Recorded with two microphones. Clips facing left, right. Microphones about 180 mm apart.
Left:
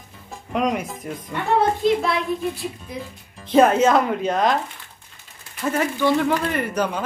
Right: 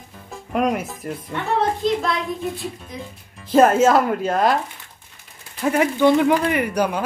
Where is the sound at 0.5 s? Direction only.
5° right (ahead or behind).